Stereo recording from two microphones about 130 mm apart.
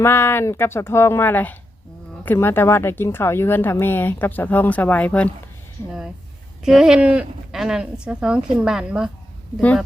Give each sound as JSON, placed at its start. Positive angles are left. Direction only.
{"t": 0.0, "sound": "speech", "side_deg": 20}
{"t": 6.7, "sound": "speech", "side_deg": -5}
{"t": 9.6, "sound": "speech", "side_deg": 10}